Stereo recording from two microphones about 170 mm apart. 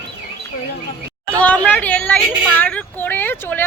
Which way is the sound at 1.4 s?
10° left (ahead or behind).